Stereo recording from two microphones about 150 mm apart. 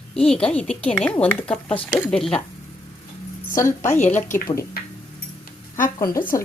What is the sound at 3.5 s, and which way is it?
Speech, 20° left (ahead or behind).